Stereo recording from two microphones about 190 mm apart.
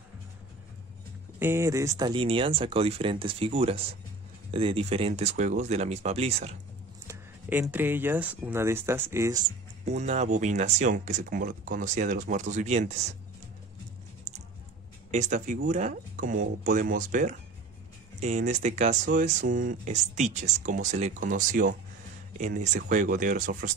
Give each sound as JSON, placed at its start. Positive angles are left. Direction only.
{"t": 1.4, "sound": "speech", "side_deg": -15}
{"t": 7.1, "sound": "speech", "side_deg": -10}
{"t": 9.8, "sound": "speech", "side_deg": -35}
{"t": 15.0, "sound": "speech", "side_deg": -40}